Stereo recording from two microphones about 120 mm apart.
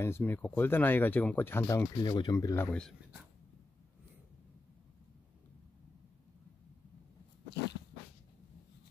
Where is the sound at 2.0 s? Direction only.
35° left (ahead or behind).